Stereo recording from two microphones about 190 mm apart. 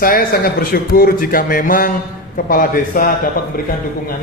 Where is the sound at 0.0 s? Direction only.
50° left (ahead or behind).